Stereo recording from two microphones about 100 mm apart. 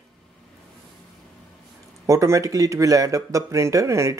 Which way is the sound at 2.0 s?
30° right (ahead or behind).